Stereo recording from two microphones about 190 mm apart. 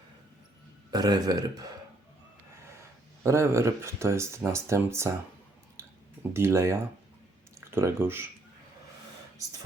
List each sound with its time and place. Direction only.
0.9 s a man's voice: 20° right (ahead or behind)
3.2 s speech: 15° right (ahead or behind)
5.8 s clicking: 15° right (ahead or behind)
6.3 s speech: 15° right (ahead or behind)